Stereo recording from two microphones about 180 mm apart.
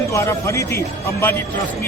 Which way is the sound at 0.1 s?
15° left (ahead or behind).